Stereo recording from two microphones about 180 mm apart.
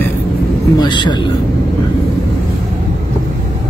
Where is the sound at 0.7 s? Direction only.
25° left (ahead or behind).